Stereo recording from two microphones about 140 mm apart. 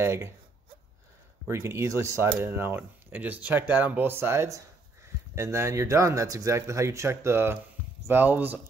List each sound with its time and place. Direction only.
0.0 s speech: 15° right (ahead or behind)
1.5 s speech: 20° right (ahead or behind)